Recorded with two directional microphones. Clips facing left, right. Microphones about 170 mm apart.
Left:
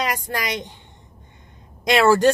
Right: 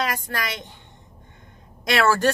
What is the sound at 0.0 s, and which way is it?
Speech, 15° left (ahead or behind).